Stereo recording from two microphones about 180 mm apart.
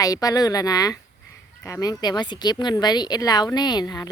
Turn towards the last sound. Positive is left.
turn(degrees=20)  # may be behind; listen again after turning